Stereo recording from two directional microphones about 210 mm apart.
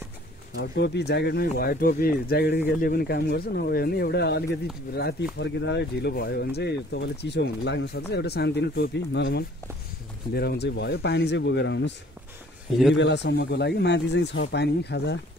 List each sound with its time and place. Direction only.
0.6 s speech: 50° left (ahead or behind)
12.9 s speech: 55° left (ahead or behind)